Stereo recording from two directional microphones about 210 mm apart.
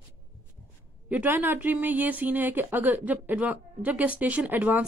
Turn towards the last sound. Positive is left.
turn(degrees=-10)  # may be behind; listen again after turning